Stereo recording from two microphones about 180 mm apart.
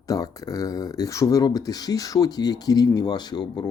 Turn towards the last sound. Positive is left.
turn(degrees=25)  # may be behind; listen again after turning